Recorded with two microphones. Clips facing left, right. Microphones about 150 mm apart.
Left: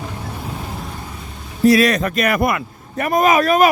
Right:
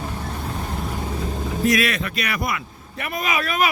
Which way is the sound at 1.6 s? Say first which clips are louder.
Left 8 dB; 35° left (ahead or behind).